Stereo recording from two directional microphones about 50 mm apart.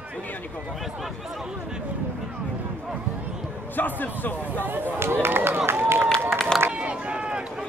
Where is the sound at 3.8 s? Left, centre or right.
Left.